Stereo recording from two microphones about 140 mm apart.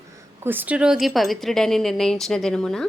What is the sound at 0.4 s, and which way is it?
Speech, 15° right (ahead or behind).